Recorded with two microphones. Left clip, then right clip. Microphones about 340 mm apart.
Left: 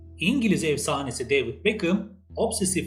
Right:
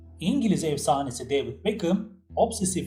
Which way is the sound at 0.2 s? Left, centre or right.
Centre.